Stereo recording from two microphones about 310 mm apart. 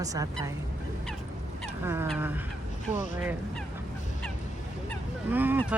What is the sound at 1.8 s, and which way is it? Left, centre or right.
Speech, centre.